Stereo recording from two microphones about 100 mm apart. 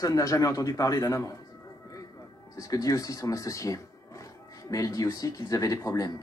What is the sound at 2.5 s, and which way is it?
Speech, 35° left (ahead or behind).